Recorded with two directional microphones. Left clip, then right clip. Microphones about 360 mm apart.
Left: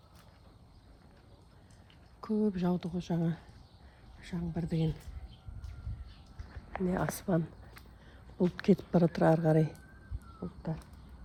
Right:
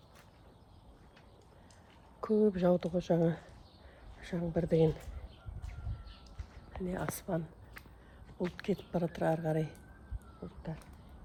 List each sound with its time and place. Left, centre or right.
2.2 s a woman's voice: centre
6.8 s speech: left
8.5 s speech: left